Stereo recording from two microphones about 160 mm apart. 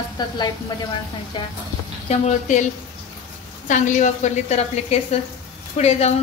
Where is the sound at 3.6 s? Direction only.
50° left (ahead or behind).